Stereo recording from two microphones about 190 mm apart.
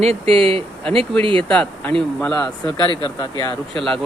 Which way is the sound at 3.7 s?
Centre (ahead or behind).